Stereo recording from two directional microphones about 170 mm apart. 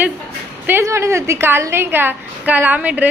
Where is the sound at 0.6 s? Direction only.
15° right (ahead or behind).